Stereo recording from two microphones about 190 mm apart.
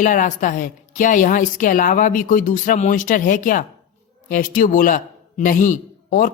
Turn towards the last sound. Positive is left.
turn(degrees=45)  # may be behind; listen again after turning